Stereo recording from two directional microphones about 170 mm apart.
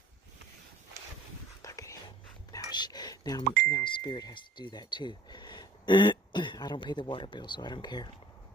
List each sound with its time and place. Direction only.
1.6 s dog: 20° left (ahead or behind)
2.5 s speech: 25° left (ahead or behind)